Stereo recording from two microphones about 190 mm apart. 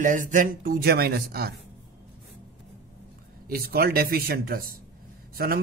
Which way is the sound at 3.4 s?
50° right (ahead or behind).